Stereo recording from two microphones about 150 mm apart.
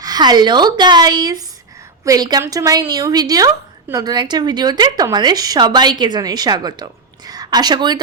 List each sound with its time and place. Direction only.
0.0 s speech: 25° right (ahead or behind)